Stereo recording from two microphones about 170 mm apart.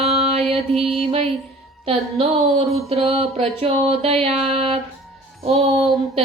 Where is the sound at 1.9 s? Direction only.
35° right (ahead or behind).